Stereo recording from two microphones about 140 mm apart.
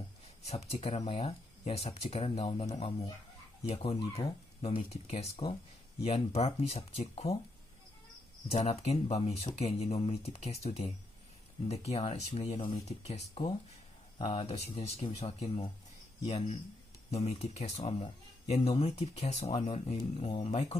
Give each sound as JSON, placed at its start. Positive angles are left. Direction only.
{"t": 0.5, "sound": "speech", "side_deg": 50}
{"t": 3.6, "sound": "speech", "side_deg": 45}
{"t": 8.5, "sound": "speech", "side_deg": 50}
{"t": 17.1, "sound": "speech", "side_deg": 45}